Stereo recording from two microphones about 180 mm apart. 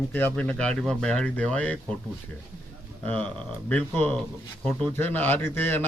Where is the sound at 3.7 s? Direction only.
10° left (ahead or behind).